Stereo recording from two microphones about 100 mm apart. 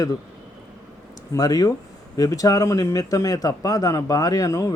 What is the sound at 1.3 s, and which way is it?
A man's voice, 40° left (ahead or behind).